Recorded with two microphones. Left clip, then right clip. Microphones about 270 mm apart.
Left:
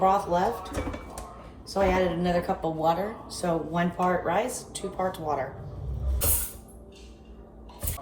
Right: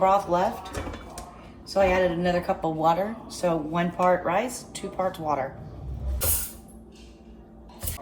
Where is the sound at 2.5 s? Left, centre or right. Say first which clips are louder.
Right 2 dB; right.